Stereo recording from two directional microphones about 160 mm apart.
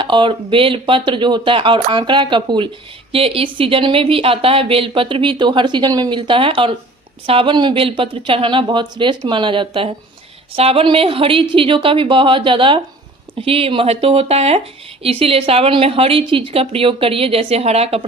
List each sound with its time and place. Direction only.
0.0 s speech: 30° right (ahead or behind)